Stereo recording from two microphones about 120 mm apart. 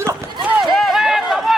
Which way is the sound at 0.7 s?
Centre (ahead or behind).